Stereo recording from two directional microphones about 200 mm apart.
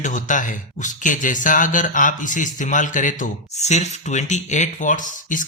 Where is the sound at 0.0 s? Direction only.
40° left (ahead or behind).